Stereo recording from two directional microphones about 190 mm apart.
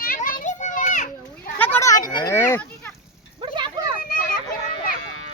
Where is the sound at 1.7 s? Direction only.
15° left (ahead or behind).